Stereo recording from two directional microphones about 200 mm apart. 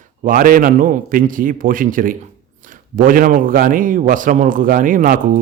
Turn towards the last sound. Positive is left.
turn(degrees=-45)  # may be behind; listen again after turning